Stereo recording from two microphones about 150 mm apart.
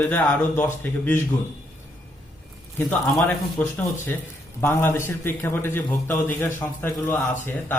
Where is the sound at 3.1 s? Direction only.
10° left (ahead or behind).